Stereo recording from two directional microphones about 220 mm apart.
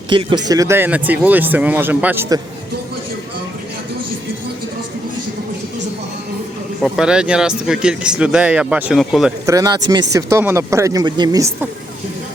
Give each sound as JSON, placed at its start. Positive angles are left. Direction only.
{"t": 0.1, "sound": "speech", "side_deg": -20}
{"t": 6.8, "sound": "speech", "side_deg": 0}
{"t": 9.5, "sound": "speech", "side_deg": -15}